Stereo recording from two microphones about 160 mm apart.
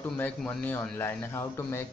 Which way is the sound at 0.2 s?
10° left (ahead or behind).